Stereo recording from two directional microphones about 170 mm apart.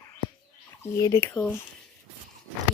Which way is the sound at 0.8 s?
20° left (ahead or behind).